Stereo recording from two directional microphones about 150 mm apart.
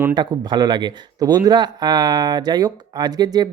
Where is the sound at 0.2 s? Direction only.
30° right (ahead or behind).